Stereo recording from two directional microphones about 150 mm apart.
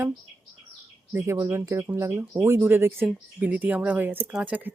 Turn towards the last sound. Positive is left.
turn(degrees=-10)  # may be behind; listen again after turning